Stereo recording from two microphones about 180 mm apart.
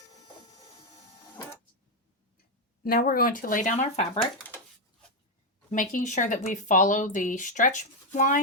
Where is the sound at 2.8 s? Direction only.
55° left (ahead or behind); by 4.1 s 40° left (ahead or behind).